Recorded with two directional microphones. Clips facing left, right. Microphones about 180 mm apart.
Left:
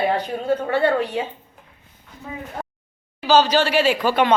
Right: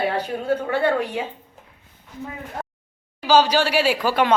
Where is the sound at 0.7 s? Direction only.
10° right (ahead or behind).